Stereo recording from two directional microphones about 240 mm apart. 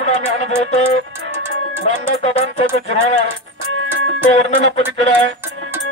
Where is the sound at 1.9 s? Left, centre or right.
Left.